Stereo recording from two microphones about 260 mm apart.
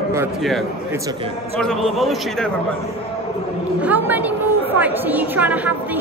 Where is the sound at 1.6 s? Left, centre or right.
Centre.